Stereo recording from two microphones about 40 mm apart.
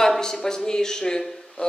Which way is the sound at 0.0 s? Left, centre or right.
Centre.